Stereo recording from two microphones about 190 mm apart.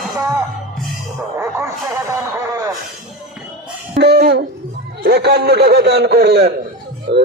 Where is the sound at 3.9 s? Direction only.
60° right (ahead or behind).